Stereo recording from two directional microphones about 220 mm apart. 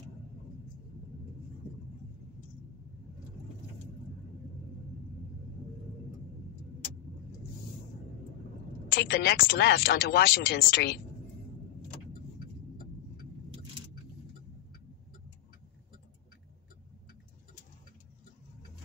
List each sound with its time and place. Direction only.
8.9 s speech: 45° left (ahead or behind)